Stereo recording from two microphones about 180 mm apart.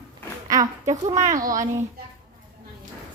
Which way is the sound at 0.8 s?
40° right (ahead or behind).